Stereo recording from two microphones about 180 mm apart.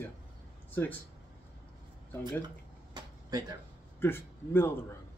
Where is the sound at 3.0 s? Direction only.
20° right (ahead or behind).